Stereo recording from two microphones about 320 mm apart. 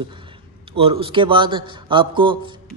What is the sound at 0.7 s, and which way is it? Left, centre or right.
A man's voice, centre.